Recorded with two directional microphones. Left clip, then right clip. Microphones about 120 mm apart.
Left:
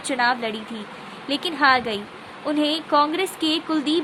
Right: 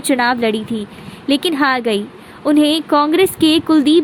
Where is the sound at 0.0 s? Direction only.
55° right (ahead or behind).